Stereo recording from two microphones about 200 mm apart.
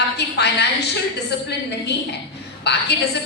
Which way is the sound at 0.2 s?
55° left (ahead or behind).